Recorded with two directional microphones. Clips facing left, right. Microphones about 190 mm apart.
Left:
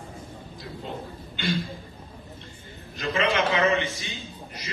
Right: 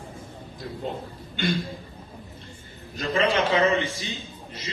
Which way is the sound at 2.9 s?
35° right (ahead or behind).